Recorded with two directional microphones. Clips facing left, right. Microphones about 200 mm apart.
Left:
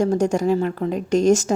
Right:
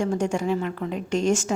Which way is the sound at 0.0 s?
40° left (ahead or behind).